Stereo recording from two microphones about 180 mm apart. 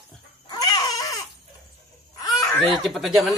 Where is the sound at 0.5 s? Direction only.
20° left (ahead or behind).